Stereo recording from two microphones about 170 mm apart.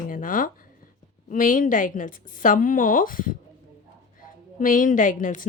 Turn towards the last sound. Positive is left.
turn(degrees=50)  # may be behind; listen again after turning